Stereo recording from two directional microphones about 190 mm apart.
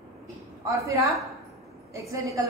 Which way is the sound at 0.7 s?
15° right (ahead or behind).